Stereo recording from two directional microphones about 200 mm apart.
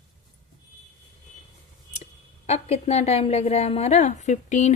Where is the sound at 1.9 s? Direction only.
35° left (ahead or behind).